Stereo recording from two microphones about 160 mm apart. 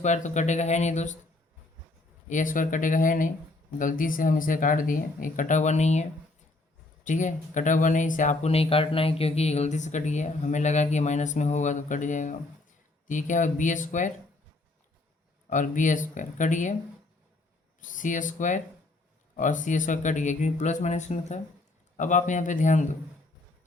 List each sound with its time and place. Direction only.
0.0 s speech: 50° left (ahead or behind)
2.3 s speech: 55° left (ahead or behind)
15.4 s speech: 50° left (ahead or behind)
17.7 s speech: 55° left (ahead or behind)